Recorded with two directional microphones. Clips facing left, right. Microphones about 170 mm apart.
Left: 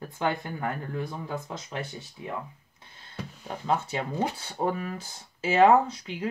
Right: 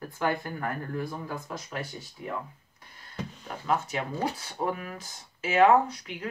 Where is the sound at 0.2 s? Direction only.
20° left (ahead or behind).